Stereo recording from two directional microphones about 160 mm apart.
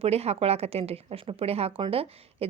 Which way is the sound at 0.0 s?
40° right (ahead or behind).